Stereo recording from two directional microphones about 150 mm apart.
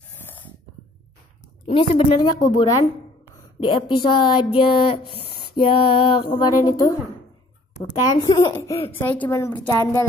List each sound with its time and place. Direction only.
0.2 s snort: 15° left (ahead or behind)
1.7 s speech: 35° left (ahead or behind)
2.3 s a woman's voice: 25° left (ahead or behind)
8.1 s a woman's voice: 25° left (ahead or behind)
8.8 s a woman's voice: 10° left (ahead or behind)